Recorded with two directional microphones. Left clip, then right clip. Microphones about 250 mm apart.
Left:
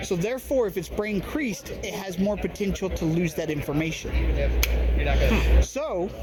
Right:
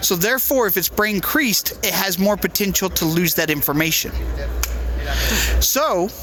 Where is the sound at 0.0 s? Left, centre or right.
Right.